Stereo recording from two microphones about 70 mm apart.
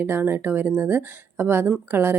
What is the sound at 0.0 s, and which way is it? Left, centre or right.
Speech, right.